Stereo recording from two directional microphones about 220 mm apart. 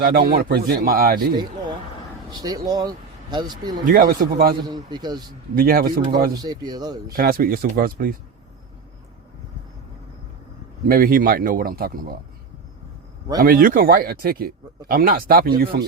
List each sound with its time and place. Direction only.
0.0 s a man's voice: 45° right (ahead or behind)
2.3 s speech: 15° right (ahead or behind)
3.8 s speech: 40° right (ahead or behind)
4.6 s speech: 20° right (ahead or behind)
5.5 s speech: 40° right (ahead or behind)
6.3 s speech: 15° right (ahead or behind)
7.1 s speech: 40° right (ahead or behind)
10.8 s speech: 40° right (ahead or behind)
13.4 s speech: 40° right (ahead or behind)